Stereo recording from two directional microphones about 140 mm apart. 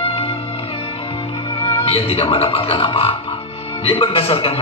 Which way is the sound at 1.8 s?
45° left (ahead or behind).